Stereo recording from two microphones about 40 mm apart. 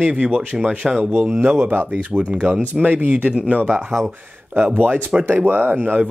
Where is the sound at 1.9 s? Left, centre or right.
Right.